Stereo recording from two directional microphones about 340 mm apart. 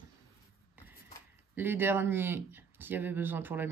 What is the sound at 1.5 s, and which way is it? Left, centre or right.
Speech, centre.